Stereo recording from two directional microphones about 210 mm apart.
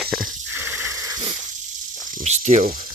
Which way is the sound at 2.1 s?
35° right (ahead or behind).